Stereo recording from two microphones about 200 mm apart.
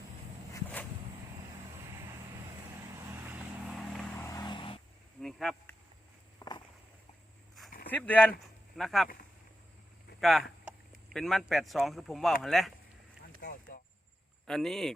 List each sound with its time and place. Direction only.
0.5 s a sound: 10° left (ahead or behind)
3.2 s vehicle: centre (ahead or behind)
4.2 s vehicle: 20° left (ahead or behind)
5.2 s a sound: centre (ahead or behind)
6.4 s walk: 25° left (ahead or behind)
7.9 s speech: 10° left (ahead or behind)
10.2 s speech: centre (ahead or behind)
13.4 s a sound: 45° left (ahead or behind)
14.4 s speech: centre (ahead or behind)